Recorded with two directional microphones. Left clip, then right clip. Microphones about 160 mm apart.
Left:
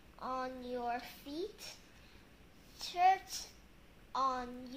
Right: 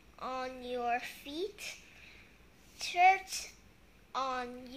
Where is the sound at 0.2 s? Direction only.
35° right (ahead or behind).